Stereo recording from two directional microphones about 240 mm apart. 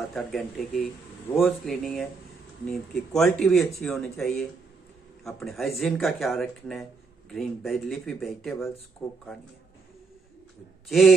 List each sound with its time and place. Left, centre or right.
0.0 s speech: centre
10.9 s speech: centre